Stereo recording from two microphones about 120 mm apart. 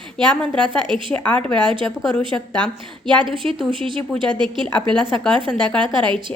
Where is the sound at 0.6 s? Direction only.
40° right (ahead or behind).